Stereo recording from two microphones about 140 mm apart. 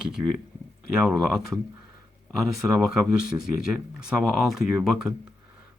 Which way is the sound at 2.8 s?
5° right (ahead or behind).